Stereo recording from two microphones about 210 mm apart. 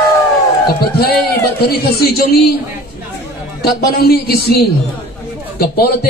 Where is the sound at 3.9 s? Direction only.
45° left (ahead or behind).